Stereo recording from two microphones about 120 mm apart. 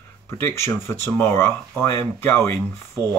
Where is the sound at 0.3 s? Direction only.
25° left (ahead or behind).